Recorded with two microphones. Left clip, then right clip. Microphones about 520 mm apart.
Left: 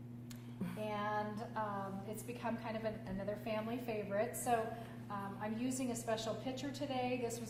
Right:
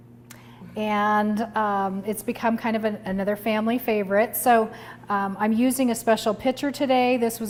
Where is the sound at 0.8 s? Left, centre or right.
Right.